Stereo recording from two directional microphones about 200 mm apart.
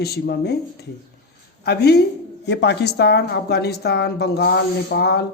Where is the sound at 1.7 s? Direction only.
55° left (ahead or behind).